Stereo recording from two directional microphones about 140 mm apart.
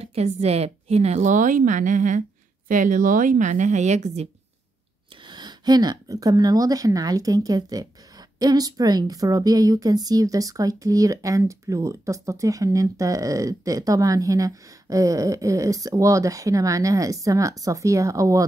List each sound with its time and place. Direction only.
0.0 s speech: 50° right (ahead or behind)
5.2 s a woman's voice: 30° right (ahead or behind)